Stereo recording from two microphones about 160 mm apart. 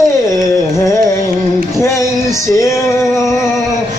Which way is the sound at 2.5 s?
20° left (ahead or behind).